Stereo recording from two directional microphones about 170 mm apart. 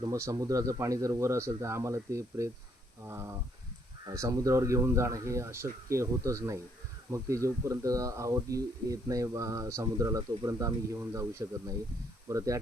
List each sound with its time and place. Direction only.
0.0 s speech: 20° right (ahead or behind)